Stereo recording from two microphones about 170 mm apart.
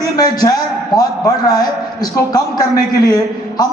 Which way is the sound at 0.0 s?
20° left (ahead or behind).